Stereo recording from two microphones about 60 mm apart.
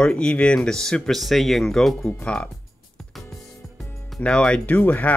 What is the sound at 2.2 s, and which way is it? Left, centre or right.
Speech, centre.